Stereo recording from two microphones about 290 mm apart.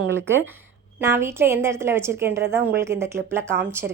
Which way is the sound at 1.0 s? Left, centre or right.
Centre.